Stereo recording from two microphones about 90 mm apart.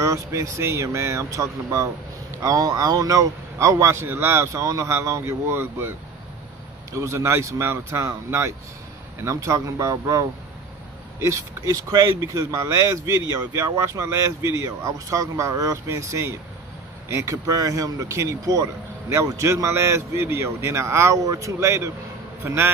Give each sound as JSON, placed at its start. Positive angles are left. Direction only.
{"t": 0.0, "sound": "a man's voice", "side_deg": -35}